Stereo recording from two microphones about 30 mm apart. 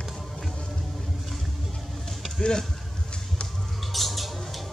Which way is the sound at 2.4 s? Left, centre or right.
Left.